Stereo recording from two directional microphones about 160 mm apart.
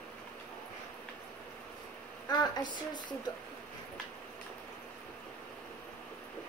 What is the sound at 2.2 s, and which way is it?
Speech, 25° left (ahead or behind).